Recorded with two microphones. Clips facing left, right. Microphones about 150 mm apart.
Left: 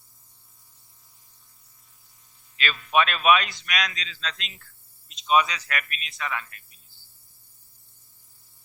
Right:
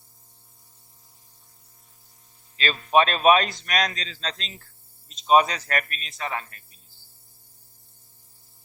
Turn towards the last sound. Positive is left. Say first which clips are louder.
# right 2 dB
turn(degrees=-35)  # may be behind; listen again after turning